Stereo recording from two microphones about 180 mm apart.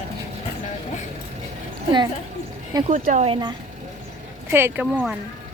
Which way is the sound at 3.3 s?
25° right (ahead or behind).